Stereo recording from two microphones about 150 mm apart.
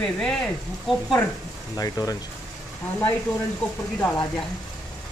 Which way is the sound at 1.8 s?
25° left (ahead or behind).